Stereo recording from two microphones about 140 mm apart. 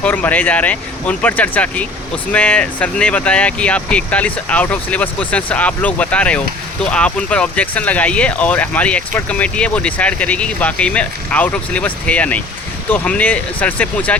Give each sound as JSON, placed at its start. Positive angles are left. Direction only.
{"t": 0.0, "sound": "speech", "side_deg": 10}